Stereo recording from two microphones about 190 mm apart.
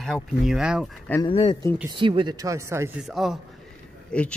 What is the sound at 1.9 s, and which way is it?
Speech, 25° right (ahead or behind).